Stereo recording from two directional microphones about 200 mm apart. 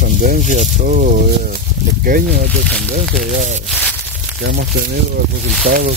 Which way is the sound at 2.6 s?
Centre (ahead or behind).